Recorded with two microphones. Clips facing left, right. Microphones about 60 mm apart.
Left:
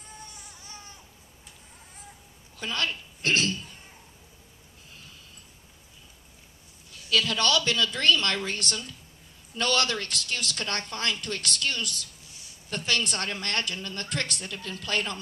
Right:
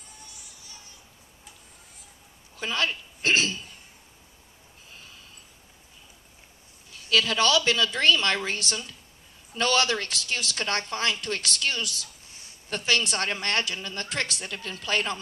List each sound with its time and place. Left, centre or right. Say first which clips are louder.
0.3 s music: left 3 dB; left
2.6 s a woman's voice: right 2 dB; centre
7.2 s a woman's voice: right 2 dB; centre
12.3 s a sound: right 3 dB; right
12.9 s a woman's voice: right 3 dB; centre
13.8 s a woman's voice: right 1 dB; centre